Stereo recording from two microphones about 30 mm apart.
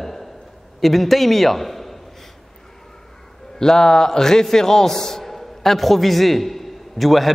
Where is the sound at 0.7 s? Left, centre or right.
Centre.